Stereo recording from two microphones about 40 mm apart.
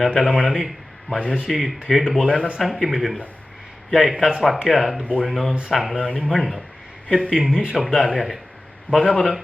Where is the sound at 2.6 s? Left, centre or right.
Centre.